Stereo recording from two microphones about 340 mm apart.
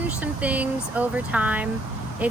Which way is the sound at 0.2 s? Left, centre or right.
Centre.